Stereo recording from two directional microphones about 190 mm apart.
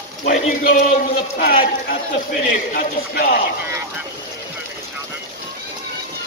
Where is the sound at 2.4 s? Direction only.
40° left (ahead or behind).